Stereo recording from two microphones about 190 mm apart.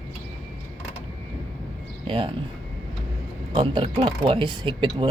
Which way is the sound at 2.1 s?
30° right (ahead or behind).